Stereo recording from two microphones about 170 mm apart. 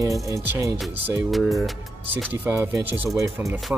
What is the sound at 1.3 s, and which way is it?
Speech, centre (ahead or behind).